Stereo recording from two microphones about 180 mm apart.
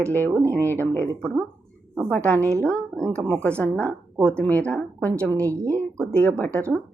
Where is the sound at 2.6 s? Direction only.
5° left (ahead or behind).